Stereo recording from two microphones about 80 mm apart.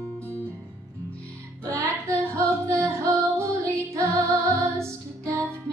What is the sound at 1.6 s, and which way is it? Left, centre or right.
Music, right.